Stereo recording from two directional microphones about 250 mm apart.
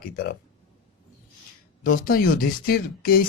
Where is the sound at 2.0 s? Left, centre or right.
Left.